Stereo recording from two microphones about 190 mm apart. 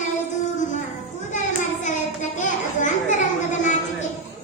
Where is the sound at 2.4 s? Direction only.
40° left (ahead or behind).